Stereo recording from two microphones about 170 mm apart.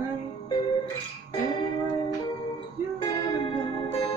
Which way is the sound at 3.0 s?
25° left (ahead or behind).